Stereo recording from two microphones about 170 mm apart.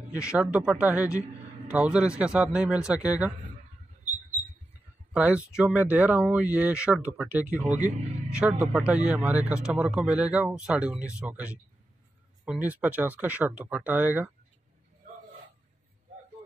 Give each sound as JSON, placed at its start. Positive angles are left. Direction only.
{"t": 0.1, "sound": "a man's voice", "side_deg": -5}
{"t": 5.1, "sound": "speech", "side_deg": -5}
{"t": 7.6, "sound": "speech", "side_deg": -45}
{"t": 8.3, "sound": "speech", "side_deg": -5}